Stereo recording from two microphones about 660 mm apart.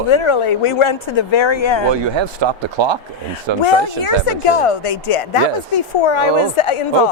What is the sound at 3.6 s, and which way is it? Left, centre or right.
Speech, left.